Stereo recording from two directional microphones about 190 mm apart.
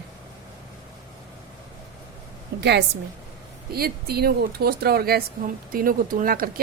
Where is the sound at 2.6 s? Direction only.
60° right (ahead or behind).